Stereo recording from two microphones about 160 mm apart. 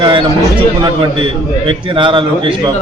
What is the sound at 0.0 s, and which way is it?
Speech, 30° right (ahead or behind).